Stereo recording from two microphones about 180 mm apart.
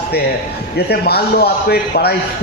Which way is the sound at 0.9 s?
60° left (ahead or behind).